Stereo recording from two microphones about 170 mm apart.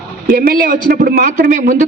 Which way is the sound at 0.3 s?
60° right (ahead or behind).